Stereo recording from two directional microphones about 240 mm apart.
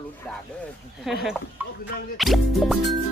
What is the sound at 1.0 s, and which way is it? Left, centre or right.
Music, centre.